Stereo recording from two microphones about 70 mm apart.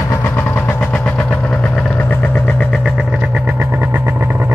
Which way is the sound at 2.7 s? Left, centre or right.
Centre.